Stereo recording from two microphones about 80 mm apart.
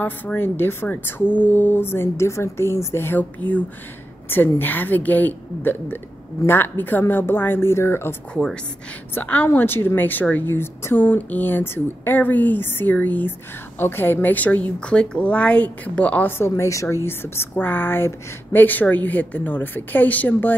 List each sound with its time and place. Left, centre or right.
0.0 s a woman's voice: left
16.3 s a woman's voice: left